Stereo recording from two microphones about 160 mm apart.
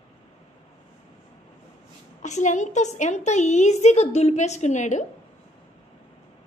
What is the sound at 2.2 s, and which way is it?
A woman's voice, 50° left (ahead or behind).